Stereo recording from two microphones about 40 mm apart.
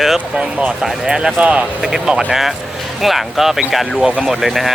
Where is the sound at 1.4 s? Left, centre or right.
Right.